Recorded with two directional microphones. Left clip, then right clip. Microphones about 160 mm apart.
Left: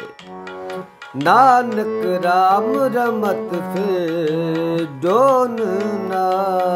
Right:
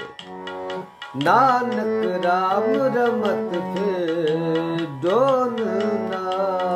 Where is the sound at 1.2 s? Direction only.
70° left (ahead or behind).